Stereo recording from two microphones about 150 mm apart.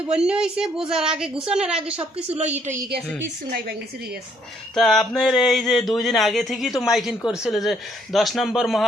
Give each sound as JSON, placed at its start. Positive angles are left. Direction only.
{"t": 0.0, "sound": "speech", "side_deg": -5}
{"t": 1.7, "sound": "speech", "side_deg": -40}
{"t": 2.5, "sound": "a woman's voice", "side_deg": -15}
{"t": 4.7, "sound": "speech", "side_deg": 5}